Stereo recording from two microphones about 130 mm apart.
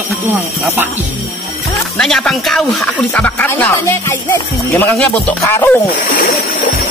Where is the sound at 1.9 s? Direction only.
5° left (ahead or behind).